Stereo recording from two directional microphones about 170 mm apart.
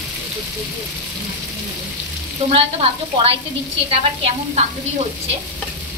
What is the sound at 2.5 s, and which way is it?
A woman's voice, 35° right (ahead or behind).